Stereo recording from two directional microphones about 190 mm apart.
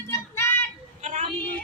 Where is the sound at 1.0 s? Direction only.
40° right (ahead or behind).